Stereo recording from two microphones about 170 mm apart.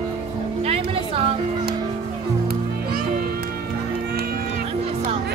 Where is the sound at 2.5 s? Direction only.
60° right (ahead or behind).